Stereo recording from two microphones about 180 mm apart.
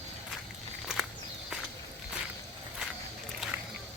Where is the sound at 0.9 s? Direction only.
Centre (ahead or behind).